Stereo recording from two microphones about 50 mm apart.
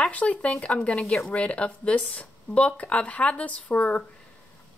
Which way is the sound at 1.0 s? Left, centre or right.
Centre.